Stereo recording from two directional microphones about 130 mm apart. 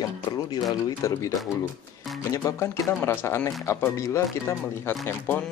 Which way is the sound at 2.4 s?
25° left (ahead or behind).